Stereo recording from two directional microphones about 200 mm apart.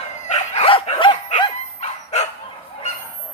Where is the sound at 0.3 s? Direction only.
35° left (ahead or behind).